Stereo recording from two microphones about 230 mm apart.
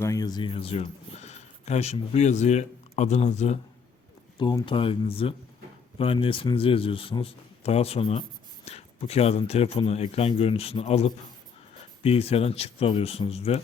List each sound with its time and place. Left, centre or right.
0.0 s speech: centre